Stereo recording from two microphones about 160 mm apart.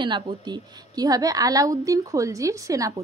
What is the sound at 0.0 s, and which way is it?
A woman's voice, 30° right (ahead or behind).